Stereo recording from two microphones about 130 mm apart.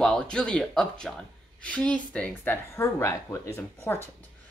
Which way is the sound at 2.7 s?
20° left (ahead or behind).